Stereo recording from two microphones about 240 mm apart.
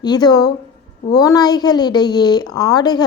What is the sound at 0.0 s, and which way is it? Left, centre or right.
A woman's voice, centre.